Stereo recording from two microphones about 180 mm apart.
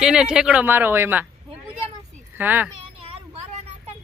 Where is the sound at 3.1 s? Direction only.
35° right (ahead or behind).